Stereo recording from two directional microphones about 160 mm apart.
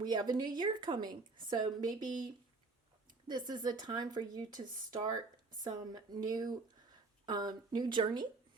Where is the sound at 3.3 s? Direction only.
25° right (ahead or behind).